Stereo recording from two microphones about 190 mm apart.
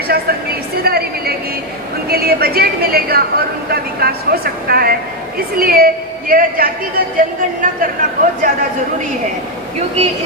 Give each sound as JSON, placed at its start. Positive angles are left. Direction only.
{"t": 0.1, "sound": "a woman's voice", "side_deg": -55}